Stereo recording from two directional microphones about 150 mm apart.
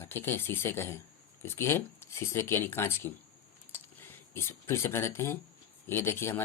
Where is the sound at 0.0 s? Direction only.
15° left (ahead or behind).